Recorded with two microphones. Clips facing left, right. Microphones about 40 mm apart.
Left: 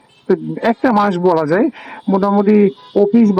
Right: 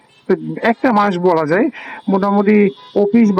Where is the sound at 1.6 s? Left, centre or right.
Right.